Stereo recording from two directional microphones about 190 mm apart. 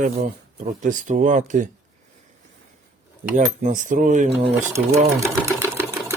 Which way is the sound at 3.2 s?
40° right (ahead or behind).